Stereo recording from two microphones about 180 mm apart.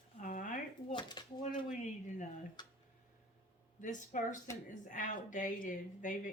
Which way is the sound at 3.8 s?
45° left (ahead or behind).